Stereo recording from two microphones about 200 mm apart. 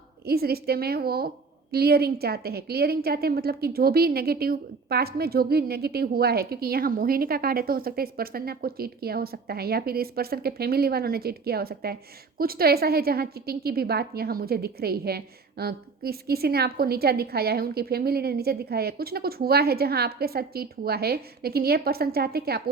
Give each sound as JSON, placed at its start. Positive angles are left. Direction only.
{"t": 0.3, "sound": "a woman's voice", "side_deg": -50}